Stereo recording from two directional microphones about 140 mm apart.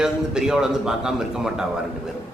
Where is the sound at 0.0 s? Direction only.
5° right (ahead or behind).